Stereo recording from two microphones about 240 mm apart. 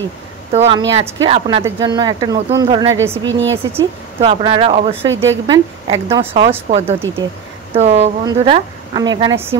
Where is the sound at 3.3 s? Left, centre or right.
Right.